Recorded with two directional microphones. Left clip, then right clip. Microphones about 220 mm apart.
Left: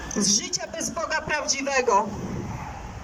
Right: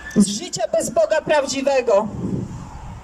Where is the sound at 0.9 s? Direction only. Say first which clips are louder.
Right 9 dB; 50° right (ahead or behind).